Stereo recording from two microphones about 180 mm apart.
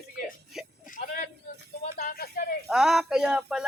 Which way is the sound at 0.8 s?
50° left (ahead or behind).